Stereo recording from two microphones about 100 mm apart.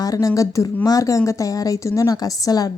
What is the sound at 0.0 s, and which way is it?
A woman's voice, 35° left (ahead or behind).